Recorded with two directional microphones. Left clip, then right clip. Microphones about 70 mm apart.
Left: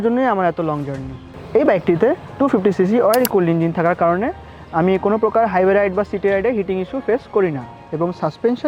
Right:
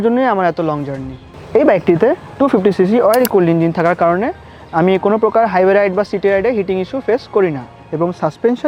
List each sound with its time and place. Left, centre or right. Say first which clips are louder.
0.0 s speech: right 3 dB; right
1.5 s speech: right 4 dB; right
3.3 s speech: right 4 dB; right